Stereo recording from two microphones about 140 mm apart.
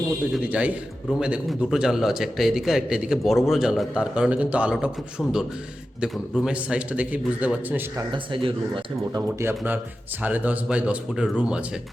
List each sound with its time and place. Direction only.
0.3 s a man's voice: 10° right (ahead or behind)
8.1 s speech: 40° right (ahead or behind)
9.1 s a man's voice: 15° right (ahead or behind)